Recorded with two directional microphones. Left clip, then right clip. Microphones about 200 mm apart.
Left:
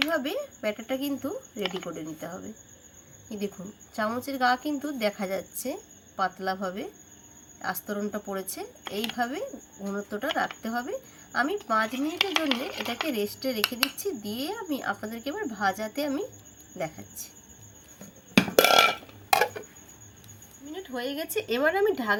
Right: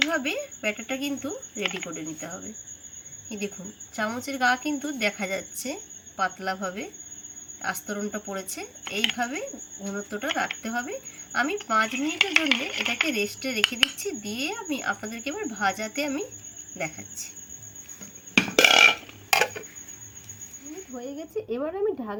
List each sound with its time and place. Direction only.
0.1 s a woman's voice: 5° left (ahead or behind)
18.3 s burping: 50° left (ahead or behind)
20.9 s a woman's voice: 20° left (ahead or behind)